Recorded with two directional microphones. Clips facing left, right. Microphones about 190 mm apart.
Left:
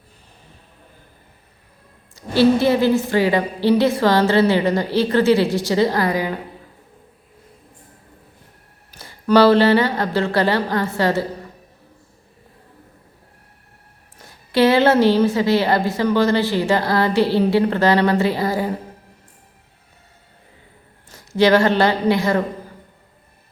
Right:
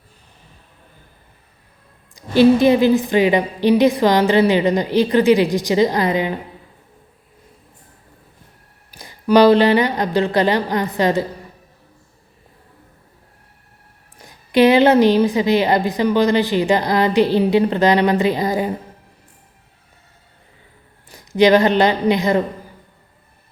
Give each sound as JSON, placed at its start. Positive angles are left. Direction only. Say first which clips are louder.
{"t": 2.1, "sound": "a woman's voice", "louder": "right 3 dB", "side_deg": -15}
{"t": 8.9, "sound": "a woman's voice", "louder": "right 1 dB", "side_deg": -15}
{"t": 14.2, "sound": "a woman's voice", "louder": "right 3 dB", "side_deg": -15}
{"t": 21.1, "sound": "speech", "louder": "right 2 dB", "side_deg": -15}